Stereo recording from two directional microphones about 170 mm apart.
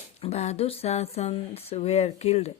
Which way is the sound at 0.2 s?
40° left (ahead or behind).